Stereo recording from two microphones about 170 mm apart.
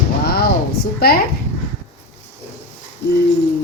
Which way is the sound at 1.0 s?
65° left (ahead or behind).